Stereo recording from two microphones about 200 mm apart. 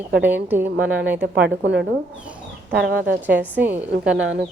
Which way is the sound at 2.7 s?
50° right (ahead or behind).